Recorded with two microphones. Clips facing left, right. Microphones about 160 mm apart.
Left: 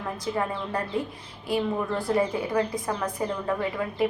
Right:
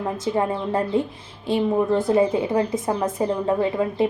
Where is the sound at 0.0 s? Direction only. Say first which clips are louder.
Right 6 dB; 25° right (ahead or behind).